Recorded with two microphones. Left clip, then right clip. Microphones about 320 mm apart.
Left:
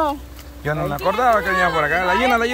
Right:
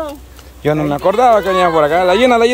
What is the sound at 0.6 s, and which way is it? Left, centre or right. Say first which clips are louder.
Speech: right 7 dB; right.